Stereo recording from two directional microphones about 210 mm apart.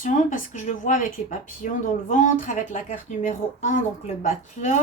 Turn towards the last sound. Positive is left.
turn(degrees=35)  # may be behind; listen again after turning